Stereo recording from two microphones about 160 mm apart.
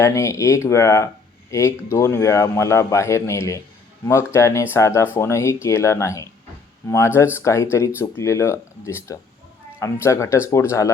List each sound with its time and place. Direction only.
0.0 s speech: 20° left (ahead or behind)